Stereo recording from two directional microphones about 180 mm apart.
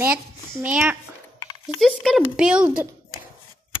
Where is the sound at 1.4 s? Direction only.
25° left (ahead or behind).